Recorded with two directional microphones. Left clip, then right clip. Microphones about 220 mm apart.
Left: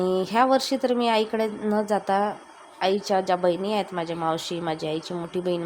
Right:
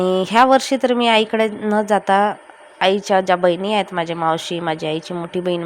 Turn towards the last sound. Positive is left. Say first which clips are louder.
# right 6 dB
turn(degrees=-15)  # may be behind; listen again after turning